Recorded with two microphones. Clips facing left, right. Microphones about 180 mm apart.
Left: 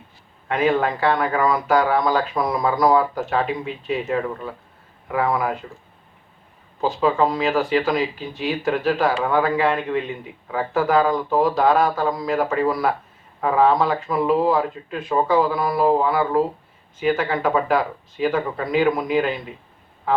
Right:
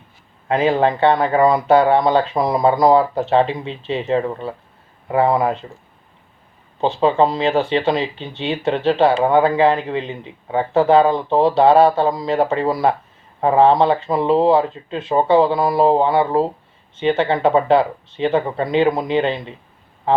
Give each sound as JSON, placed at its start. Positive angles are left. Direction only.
{"t": 0.4, "sound": "speech", "side_deg": -30}
{"t": 6.8, "sound": "speech", "side_deg": -25}